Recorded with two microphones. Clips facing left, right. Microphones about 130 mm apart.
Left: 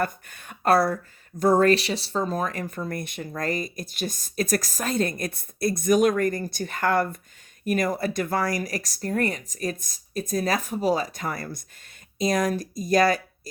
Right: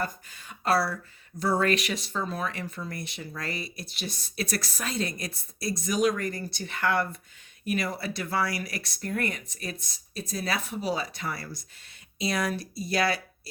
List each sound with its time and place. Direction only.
0.0 s speech: 55° left (ahead or behind)
1.7 s speech: 30° left (ahead or behind)